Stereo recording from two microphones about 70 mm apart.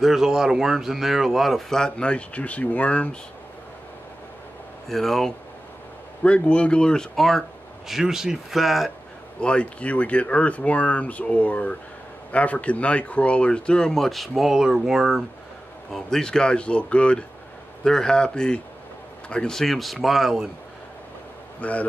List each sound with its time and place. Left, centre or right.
0.0 s speech: centre
4.8 s speech: centre
6.2 s speech: centre
7.9 s speech: centre
9.4 s speech: centre
15.9 s speech: centre
21.5 s a man's voice: centre